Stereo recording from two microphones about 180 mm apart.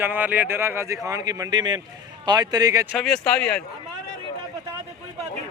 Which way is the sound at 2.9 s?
5° left (ahead or behind).